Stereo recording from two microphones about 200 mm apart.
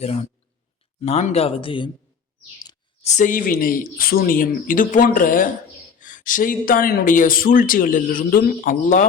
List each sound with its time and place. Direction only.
0.0 s speech: 35° left (ahead or behind)
3.0 s speech: 35° left (ahead or behind)